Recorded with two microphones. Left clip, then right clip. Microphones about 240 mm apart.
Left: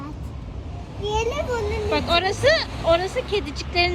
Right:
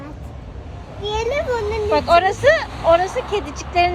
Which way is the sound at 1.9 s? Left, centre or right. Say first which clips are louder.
Right 7 dB; centre.